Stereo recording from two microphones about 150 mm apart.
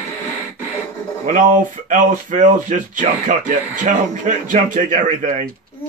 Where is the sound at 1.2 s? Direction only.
60° right (ahead or behind).